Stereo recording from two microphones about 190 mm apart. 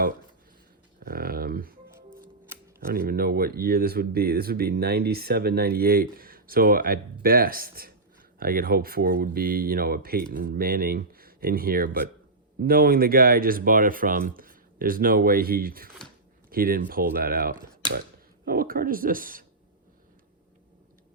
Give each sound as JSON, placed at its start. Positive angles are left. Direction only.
{"t": 0.9, "sound": "a sound", "side_deg": -50}
{"t": 2.5, "sound": "camera", "side_deg": -10}
{"t": 2.9, "sound": "speech", "side_deg": -50}